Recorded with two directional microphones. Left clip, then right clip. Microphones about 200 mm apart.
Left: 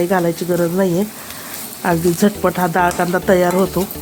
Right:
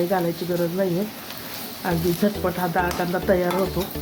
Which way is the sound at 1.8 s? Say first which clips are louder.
Left 7 dB; 45° left (ahead or behind).